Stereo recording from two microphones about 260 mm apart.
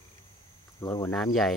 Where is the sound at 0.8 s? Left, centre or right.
Centre.